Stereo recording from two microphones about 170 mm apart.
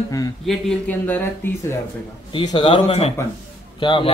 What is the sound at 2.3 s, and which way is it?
A man's voice, 30° left (ahead or behind).